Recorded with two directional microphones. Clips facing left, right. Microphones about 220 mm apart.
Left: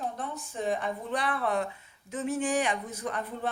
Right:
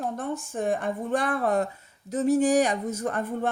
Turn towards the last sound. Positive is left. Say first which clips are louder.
# right 6 dB
turn(degrees=-50)  # may be behind; listen again after turning